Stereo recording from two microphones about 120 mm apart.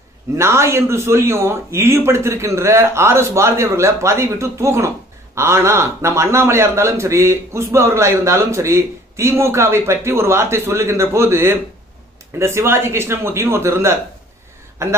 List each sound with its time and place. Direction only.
0.4 s a man's voice: 25° right (ahead or behind)